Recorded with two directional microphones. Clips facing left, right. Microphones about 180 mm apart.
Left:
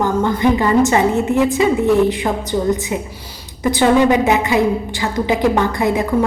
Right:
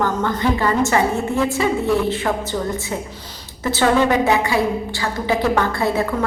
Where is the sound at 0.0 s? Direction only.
15° left (ahead or behind).